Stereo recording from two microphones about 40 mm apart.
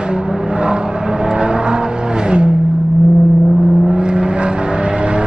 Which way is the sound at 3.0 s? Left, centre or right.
Centre.